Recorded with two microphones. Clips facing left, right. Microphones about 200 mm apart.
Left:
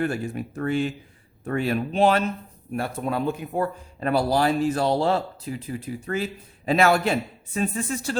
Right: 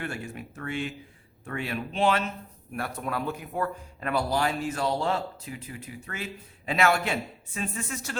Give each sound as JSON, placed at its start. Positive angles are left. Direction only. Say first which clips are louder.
{"t": 0.0, "sound": "speech", "louder": "left 9 dB", "side_deg": 40}
{"t": 2.7, "sound": "speech", "louder": "left 5 dB", "side_deg": 25}